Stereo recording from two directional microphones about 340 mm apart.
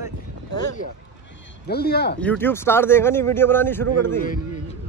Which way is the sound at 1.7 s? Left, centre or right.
Left.